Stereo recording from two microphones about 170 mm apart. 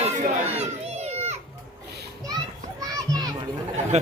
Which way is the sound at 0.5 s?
40° right (ahead or behind).